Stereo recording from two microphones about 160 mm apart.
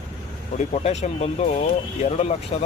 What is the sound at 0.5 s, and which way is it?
Speech, 45° left (ahead or behind).